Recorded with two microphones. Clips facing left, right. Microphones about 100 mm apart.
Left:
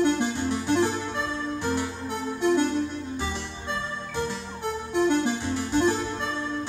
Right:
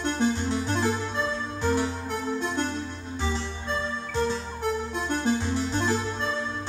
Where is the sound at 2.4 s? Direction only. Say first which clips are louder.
Left 11 dB; 15° left (ahead or behind).